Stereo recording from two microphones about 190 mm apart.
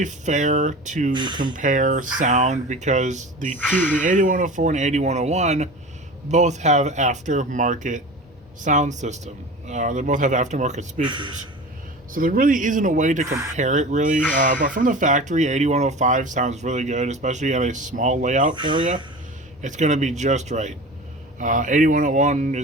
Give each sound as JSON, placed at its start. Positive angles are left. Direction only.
{"t": 0.0, "sound": "speech", "side_deg": -40}
{"t": 1.1, "sound": "speech", "side_deg": -25}
{"t": 1.5, "sound": "speech", "side_deg": -45}
{"t": 3.6, "sound": "speech", "side_deg": 10}
{"t": 4.0, "sound": "speech", "side_deg": -40}
{"t": 11.0, "sound": "speech", "side_deg": -25}
{"t": 12.1, "sound": "speech", "side_deg": -45}
{"t": 13.2, "sound": "speech", "side_deg": -15}
{"t": 13.6, "sound": "speech", "side_deg": -40}
{"t": 18.5, "sound": "speech", "side_deg": -25}
{"t": 19.6, "sound": "speech", "side_deg": -40}